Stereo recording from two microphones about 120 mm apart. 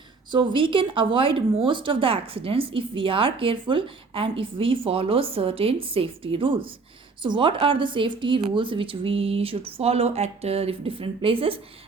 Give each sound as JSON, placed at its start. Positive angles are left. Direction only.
{"t": 0.3, "sound": "speech", "side_deg": -40}